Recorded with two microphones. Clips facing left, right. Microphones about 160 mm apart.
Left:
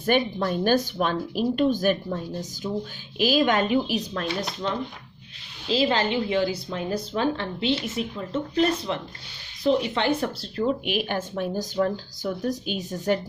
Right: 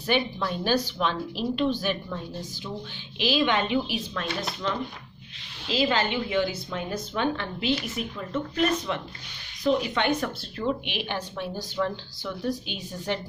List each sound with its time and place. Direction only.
0.0 s speech: 50° left (ahead or behind)
2.6 s a woman's voice: 35° left (ahead or behind)
5.7 s a woman's voice: 30° left (ahead or behind)
10.9 s speech: 45° left (ahead or behind)